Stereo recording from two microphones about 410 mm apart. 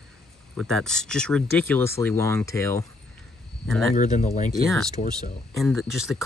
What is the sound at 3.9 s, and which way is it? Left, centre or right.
Speech, centre.